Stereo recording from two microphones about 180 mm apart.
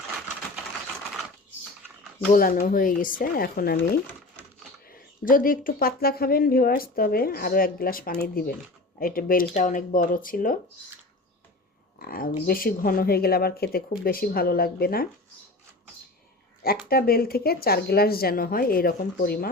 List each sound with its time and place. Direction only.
2.3 s speech: 50° left (ahead or behind)
4.9 s speech: 50° left (ahead or behind)
11.9 s a sound: 55° left (ahead or behind)
12.5 s speech: 55° left (ahead or behind)
16.9 s speech: 55° left (ahead or behind)